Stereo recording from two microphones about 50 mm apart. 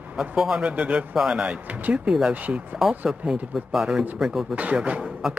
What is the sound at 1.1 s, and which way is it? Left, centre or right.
Speech, centre.